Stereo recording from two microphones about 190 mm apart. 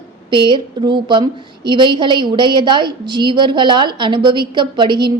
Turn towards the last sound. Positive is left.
turn(degrees=-25)  # may be behind; listen again after turning